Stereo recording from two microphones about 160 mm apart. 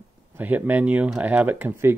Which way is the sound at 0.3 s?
10° right (ahead or behind).